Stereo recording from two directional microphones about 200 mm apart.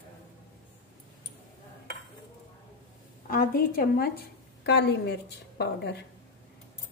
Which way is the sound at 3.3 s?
45° left (ahead or behind).